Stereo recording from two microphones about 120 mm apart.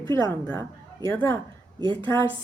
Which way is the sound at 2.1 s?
20° left (ahead or behind).